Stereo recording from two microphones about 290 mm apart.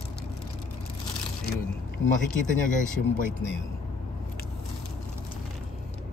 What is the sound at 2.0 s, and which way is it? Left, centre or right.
Speech, left.